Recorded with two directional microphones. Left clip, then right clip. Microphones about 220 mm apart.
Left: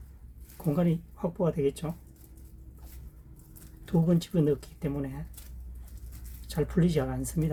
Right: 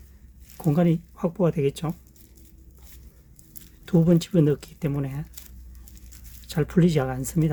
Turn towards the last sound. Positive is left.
turn(degrees=-45)  # may be behind; listen again after turning